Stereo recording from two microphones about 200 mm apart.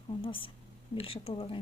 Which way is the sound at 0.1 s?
25° left (ahead or behind).